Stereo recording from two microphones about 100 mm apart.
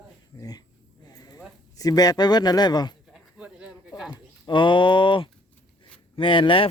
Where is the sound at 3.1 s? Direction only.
10° right (ahead or behind).